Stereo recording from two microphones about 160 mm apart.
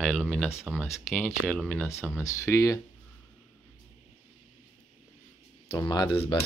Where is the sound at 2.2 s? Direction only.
20° left (ahead or behind).